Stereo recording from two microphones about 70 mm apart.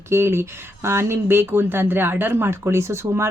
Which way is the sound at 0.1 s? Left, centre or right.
Right.